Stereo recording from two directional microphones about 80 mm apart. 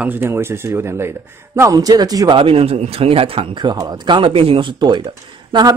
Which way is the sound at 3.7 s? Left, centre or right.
Right.